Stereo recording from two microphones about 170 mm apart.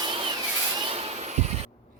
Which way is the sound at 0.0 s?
25° right (ahead or behind).